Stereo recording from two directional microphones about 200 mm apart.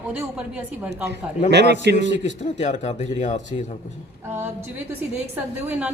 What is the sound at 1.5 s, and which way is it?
Speech, 60° right (ahead or behind).